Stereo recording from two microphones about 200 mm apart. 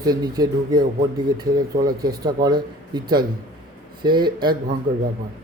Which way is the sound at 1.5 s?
45° right (ahead or behind).